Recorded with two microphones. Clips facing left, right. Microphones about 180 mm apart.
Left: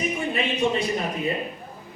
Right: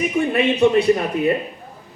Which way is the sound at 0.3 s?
65° right (ahead or behind).